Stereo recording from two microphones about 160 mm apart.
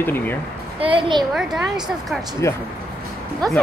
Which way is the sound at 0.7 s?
35° right (ahead or behind).